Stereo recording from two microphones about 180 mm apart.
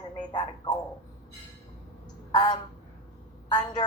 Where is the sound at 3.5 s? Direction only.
25° left (ahead or behind).